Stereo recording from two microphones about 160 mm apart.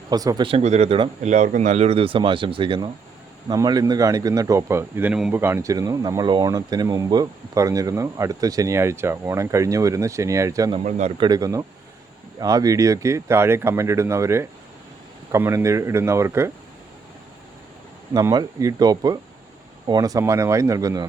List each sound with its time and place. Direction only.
0.1 s speech: 25° right (ahead or behind)
0.4 s speech: 40° right (ahead or behind)
1.2 s speech: 50° right (ahead or behind); by 10.8 s 20° right (ahead or behind)
10.8 s speech: 45° right (ahead or behind)
11.2 s speech: 25° right (ahead or behind)
18.1 s speech: 25° right (ahead or behind)